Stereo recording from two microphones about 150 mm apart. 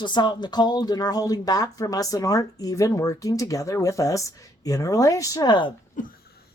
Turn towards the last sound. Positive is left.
turn(degrees=80)